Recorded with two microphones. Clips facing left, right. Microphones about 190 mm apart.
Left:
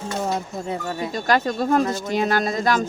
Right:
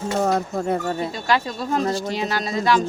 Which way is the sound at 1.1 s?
50° left (ahead or behind).